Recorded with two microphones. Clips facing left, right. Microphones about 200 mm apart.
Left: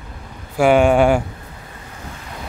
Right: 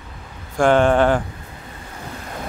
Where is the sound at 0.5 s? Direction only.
10° left (ahead or behind).